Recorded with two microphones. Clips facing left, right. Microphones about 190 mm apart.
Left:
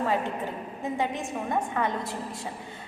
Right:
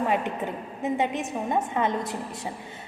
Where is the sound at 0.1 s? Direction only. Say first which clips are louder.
Right 2 dB; 20° right (ahead or behind).